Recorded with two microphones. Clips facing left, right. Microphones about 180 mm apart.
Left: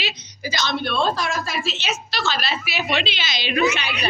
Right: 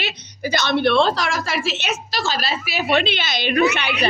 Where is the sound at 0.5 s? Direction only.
65° right (ahead or behind); by 2.0 s 85° right.